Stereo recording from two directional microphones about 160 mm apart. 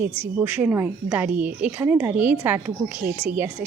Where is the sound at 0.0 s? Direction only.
10° right (ahead or behind).